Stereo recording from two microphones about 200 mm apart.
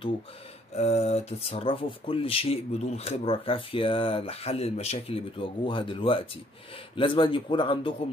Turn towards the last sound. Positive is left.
turn(degrees=25)  # may be behind; listen again after turning